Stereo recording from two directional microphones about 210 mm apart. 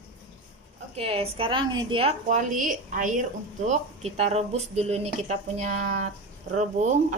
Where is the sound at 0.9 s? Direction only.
30° right (ahead or behind).